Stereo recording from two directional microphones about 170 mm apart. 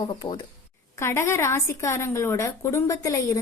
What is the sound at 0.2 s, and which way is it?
Speech, 30° left (ahead or behind).